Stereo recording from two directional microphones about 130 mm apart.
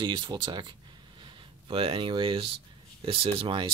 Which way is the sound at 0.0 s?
35° right (ahead or behind).